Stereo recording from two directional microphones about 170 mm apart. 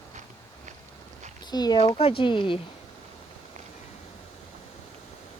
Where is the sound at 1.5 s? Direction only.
25° left (ahead or behind).